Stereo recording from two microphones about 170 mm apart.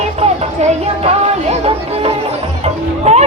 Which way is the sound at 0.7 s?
40° right (ahead or behind).